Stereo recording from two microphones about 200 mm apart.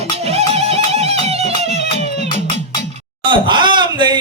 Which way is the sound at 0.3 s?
30° right (ahead or behind).